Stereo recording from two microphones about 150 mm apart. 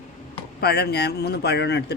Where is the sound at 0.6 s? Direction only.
90° left.